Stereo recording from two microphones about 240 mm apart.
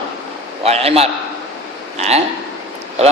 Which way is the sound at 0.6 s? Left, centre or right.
Right.